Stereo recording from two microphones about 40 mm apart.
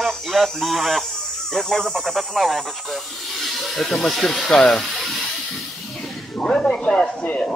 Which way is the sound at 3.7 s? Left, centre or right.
Centre.